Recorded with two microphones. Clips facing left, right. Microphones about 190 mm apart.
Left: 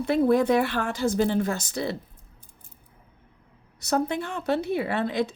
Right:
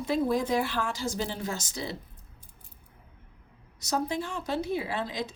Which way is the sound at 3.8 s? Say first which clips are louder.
Left 4 dB; 60° left (ahead or behind).